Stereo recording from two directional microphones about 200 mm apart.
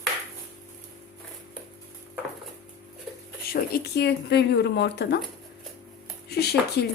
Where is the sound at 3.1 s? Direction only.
Centre (ahead or behind).